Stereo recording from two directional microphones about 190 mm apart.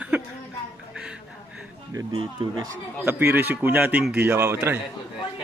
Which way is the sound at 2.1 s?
25° right (ahead or behind).